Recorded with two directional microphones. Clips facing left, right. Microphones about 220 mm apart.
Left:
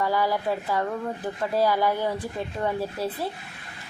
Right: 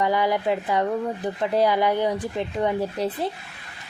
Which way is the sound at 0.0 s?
20° right (ahead or behind).